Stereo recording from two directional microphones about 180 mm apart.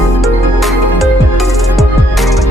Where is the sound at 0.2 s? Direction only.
Centre (ahead or behind).